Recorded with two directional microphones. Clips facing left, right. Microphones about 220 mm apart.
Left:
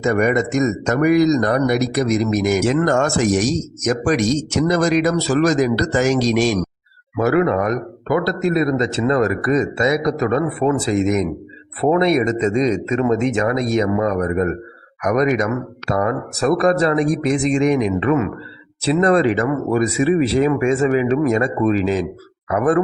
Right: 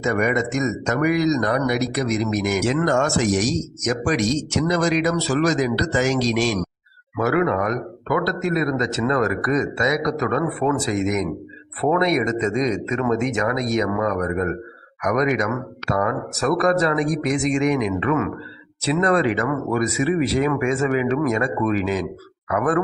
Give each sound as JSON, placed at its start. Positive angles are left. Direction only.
{"t": 0.0, "sound": "speech", "side_deg": 40}
{"t": 7.2, "sound": "a man's voice", "side_deg": 30}